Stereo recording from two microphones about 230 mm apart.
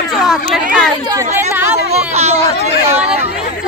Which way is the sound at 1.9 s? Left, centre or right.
Right.